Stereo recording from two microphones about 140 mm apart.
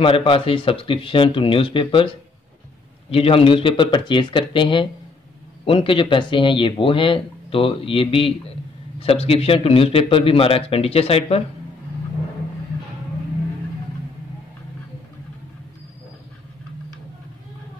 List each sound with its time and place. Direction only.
0.0 s a man's voice: 40° left (ahead or behind)